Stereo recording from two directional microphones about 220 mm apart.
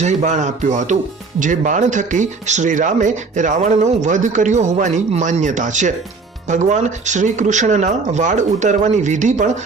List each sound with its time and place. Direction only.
0.0 s speech: 30° right (ahead or behind)